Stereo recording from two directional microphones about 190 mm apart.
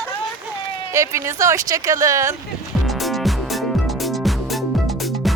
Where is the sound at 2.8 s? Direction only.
Centre (ahead or behind).